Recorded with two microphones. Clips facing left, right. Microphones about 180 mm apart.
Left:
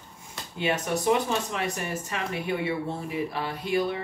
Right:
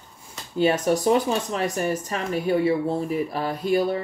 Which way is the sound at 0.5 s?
40° right (ahead or behind).